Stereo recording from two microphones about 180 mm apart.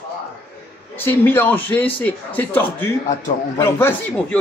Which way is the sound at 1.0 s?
10° left (ahead or behind).